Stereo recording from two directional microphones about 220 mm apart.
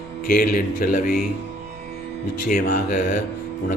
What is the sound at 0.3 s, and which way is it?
Speech, 40° left (ahead or behind).